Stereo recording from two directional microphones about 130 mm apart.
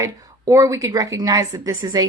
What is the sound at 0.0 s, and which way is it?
A woman's voice, 25° right (ahead or behind).